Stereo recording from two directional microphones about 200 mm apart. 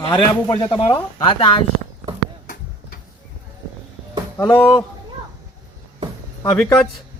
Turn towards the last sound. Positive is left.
turn(degrees=15)  # may be behind; listen again after turning